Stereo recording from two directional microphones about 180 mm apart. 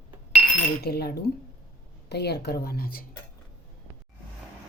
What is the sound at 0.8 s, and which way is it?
Speech, 60° left (ahead or behind).